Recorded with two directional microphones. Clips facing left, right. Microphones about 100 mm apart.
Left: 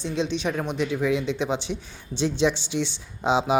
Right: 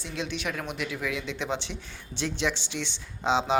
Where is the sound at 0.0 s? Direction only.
20° left (ahead or behind).